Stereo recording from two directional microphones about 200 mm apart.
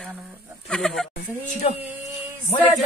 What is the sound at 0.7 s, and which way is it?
Speech, 5° left (ahead or behind).